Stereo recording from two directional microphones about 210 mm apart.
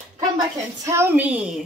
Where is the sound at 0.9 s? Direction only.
10° right (ahead or behind).